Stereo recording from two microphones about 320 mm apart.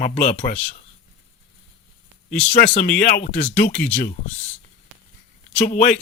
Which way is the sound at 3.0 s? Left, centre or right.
Left.